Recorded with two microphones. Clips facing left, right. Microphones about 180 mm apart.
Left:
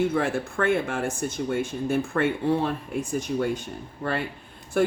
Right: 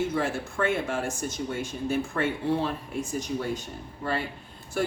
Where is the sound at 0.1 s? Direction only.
55° left (ahead or behind).